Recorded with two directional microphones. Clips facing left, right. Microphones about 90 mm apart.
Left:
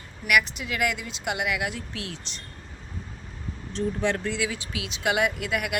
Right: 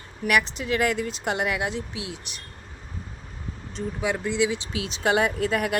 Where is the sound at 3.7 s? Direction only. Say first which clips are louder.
Left 2 dB; 5° right (ahead or behind); by 5.7 s 35° right (ahead or behind).